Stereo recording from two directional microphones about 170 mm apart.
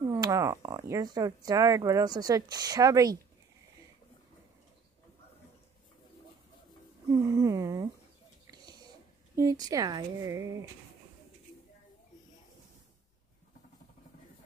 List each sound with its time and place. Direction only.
0.1 s speech: 20° right (ahead or behind)
7.1 s a sound: 20° right (ahead or behind)
8.5 s wheeze: 25° right (ahead or behind)
9.3 s speech: 20° right (ahead or behind)